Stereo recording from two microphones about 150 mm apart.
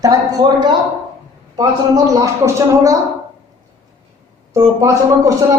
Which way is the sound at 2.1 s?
20° right (ahead or behind).